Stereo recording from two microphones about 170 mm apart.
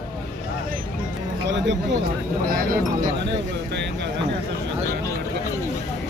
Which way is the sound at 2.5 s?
55° right (ahead or behind).